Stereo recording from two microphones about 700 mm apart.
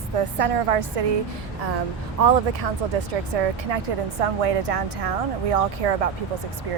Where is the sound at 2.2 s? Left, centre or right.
Right.